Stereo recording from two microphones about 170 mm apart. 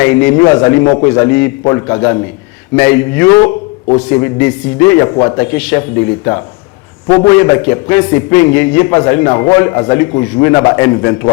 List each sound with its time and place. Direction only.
0.0 s a man's voice: 15° left (ahead or behind)